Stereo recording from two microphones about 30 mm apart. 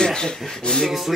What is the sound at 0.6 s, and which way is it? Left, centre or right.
Speech, left.